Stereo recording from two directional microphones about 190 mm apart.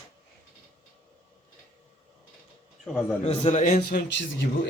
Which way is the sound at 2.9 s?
5° right (ahead or behind).